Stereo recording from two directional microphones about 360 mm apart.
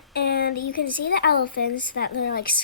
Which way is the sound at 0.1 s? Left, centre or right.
Left.